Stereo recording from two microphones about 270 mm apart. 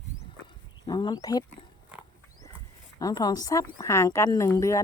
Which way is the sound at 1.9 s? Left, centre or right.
Centre.